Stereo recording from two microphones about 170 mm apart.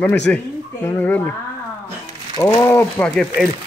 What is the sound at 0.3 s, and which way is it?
Speech, 10° left (ahead or behind).